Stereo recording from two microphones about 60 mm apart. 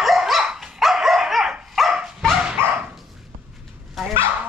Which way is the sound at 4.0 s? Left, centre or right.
Centre.